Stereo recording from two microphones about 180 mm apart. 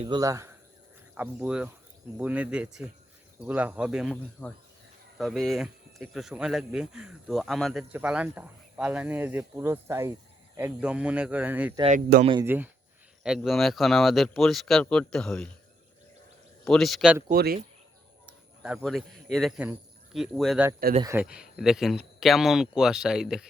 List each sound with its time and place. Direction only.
0.2 s speech: 20° right (ahead or behind)
1.1 s speech: 5° right (ahead or behind)
4.4 s speech: 15° left (ahead or behind)
5.1 s speech: centre (ahead or behind)
11.8 s speech: 40° right (ahead or behind)
12.2 s speech: 25° right (ahead or behind)
12.5 s speech: 10° right (ahead or behind)
16.6 s speech: centre (ahead or behind)
17.3 s speech: 60° right (ahead or behind)
18.3 s speech: 5° right (ahead or behind)
21.0 s speech: 15° right (ahead or behind)
21.2 s speech: 5° right (ahead or behind)